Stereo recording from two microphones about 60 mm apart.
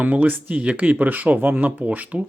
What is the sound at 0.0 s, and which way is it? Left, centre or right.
Speech, right.